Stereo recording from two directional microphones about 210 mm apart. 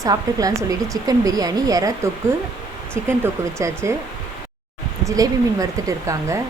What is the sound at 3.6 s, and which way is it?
Speech, 15° right (ahead or behind).